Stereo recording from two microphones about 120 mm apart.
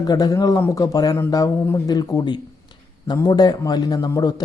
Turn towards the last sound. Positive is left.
turn(degrees=30)  # may be behind; listen again after turning